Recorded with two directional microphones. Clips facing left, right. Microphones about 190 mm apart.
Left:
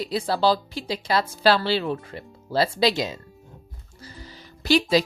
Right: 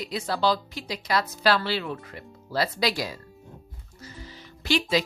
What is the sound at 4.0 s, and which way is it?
Music, 35° left (ahead or behind).